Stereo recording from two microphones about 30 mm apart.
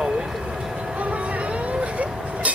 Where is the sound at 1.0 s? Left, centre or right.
Right.